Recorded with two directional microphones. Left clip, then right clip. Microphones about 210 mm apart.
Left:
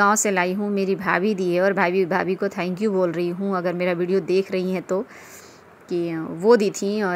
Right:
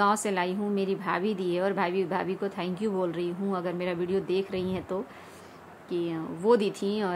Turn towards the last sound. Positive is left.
turn(degrees=25)  # may be behind; listen again after turning